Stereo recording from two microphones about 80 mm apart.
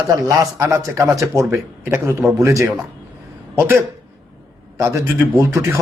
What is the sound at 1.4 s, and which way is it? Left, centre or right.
A man's voice, right.